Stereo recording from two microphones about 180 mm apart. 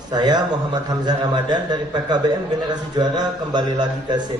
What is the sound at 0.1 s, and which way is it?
A man's voice, 25° right (ahead or behind).